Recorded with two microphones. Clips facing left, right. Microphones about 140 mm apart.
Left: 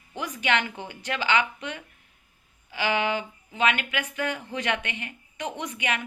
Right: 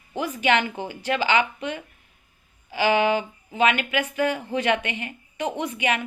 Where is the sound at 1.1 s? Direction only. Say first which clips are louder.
Right 3 dB; 20° right (ahead or behind).